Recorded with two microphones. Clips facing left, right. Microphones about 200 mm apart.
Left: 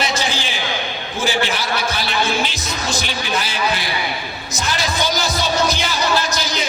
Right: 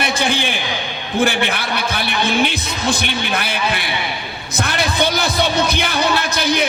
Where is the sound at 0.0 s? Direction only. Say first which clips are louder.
Right 3 dB; 55° right (ahead or behind).